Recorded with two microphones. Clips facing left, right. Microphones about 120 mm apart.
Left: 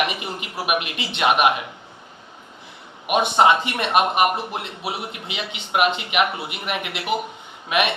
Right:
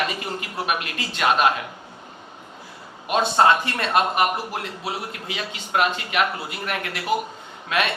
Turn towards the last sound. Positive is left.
turn(degrees=20)  # may be behind; listen again after turning